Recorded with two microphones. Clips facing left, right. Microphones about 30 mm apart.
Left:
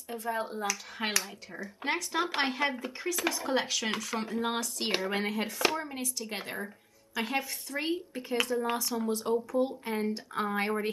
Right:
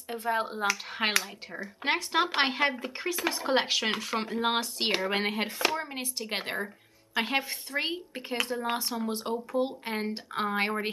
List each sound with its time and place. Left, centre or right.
0.1 s speech: right
3.5 s speech: right